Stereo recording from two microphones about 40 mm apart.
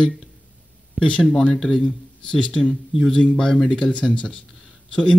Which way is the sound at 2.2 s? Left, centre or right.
Left.